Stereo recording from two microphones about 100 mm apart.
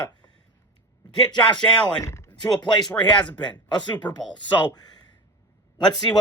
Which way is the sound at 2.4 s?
50° left (ahead or behind).